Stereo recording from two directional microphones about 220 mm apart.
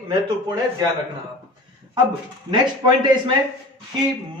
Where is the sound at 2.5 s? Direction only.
20° right (ahead or behind).